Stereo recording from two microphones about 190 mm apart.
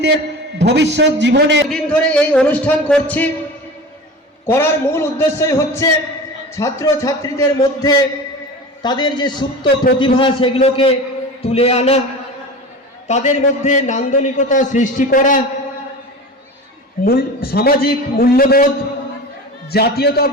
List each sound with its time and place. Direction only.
0.6 s a man's voice: 65° right (ahead or behind)
1.7 s speech: 5° left (ahead or behind)
4.4 s a man's voice: 10° left (ahead or behind); by 11.9 s 35° left (ahead or behind)
13.1 s a man's voice: 35° left (ahead or behind)
17.0 s a man's voice: 50° left (ahead or behind)
19.7 s a man's voice: 55° left (ahead or behind)